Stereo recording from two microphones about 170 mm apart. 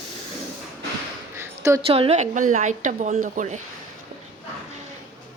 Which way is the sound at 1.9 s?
35° right (ahead or behind).